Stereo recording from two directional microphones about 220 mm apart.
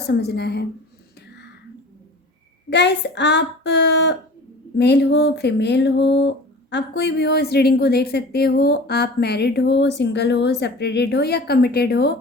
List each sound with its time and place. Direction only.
0.1 s speech: 45° left (ahead or behind)
2.6 s speech: 50° left (ahead or behind)